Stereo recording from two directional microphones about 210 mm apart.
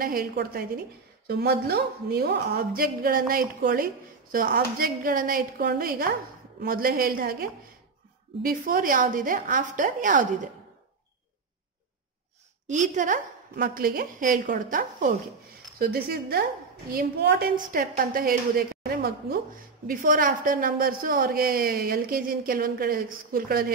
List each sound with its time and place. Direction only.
0.0 s a woman's voice: 45° right (ahead or behind)
12.6 s a woman's voice: 35° right (ahead or behind)